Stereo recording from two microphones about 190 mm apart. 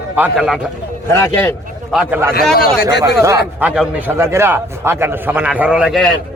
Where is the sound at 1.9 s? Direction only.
5° right (ahead or behind).